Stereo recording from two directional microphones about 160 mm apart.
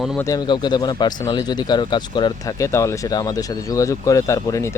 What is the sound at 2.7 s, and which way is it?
Speech, 15° left (ahead or behind).